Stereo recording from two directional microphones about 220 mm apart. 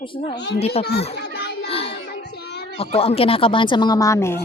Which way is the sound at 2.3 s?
45° left (ahead or behind).